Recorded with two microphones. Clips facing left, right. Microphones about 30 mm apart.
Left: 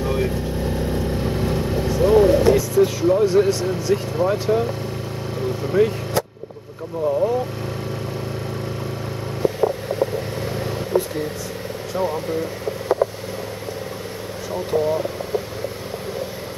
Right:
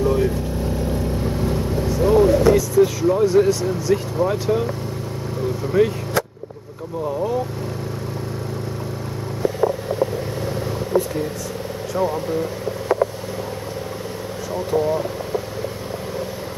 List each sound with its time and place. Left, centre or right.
0.0 s vehicle: left
3.4 s speech: centre
3.9 s speech: centre
5.8 s speech: centre
7.1 s speech: centre
12.0 s speech: centre
14.7 s speech: centre